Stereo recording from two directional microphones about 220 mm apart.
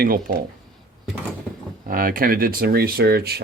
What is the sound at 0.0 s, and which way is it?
Speech, 40° right (ahead or behind).